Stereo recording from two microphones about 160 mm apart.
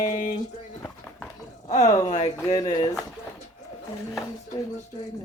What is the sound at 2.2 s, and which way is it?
Speech, 25° left (ahead or behind).